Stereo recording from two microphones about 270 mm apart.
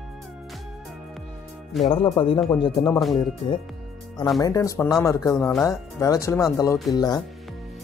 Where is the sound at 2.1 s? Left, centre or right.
Centre.